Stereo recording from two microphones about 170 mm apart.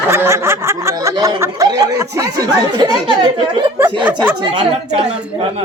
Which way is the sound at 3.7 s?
10° right (ahead or behind).